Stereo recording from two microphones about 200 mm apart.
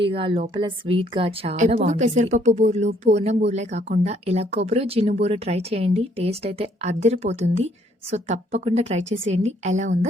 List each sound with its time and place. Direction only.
0.0 s a woman's voice: 25° right (ahead or behind)